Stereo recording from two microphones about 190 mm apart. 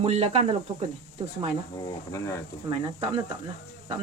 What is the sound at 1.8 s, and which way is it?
Speech, 20° left (ahead or behind).